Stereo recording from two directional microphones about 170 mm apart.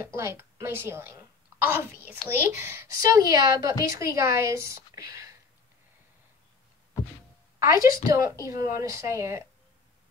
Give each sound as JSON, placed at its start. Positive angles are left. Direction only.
{"t": 0.0, "sound": "a woman's voice", "side_deg": -15}
{"t": 7.5, "sound": "a woman's voice", "side_deg": -20}